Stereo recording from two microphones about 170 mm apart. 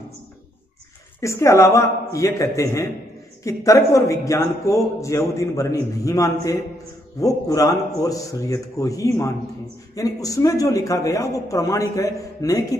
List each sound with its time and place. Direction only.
1.2 s a man's voice: 15° left (ahead or behind)